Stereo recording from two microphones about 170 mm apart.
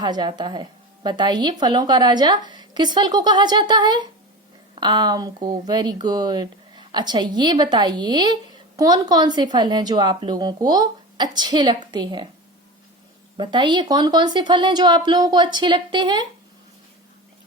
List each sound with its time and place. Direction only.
0.0 s speech: 25° right (ahead or behind)
13.3 s speech: 25° right (ahead or behind)